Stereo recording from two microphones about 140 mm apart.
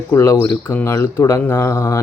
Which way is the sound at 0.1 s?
20° left (ahead or behind).